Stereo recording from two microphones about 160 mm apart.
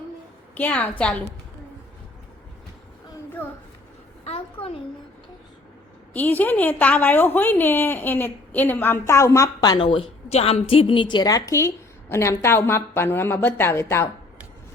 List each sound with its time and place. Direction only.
0.5 s a woman's voice: 10° left (ahead or behind)
4.2 s a sound: 40° left (ahead or behind)
6.1 s a woman's voice: 10° left (ahead or behind)